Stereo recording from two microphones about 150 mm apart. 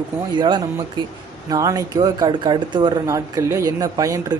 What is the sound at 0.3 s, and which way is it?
Speech, 30° right (ahead or behind).